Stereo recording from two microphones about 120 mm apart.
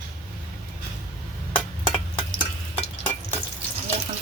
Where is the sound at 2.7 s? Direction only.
15° left (ahead or behind).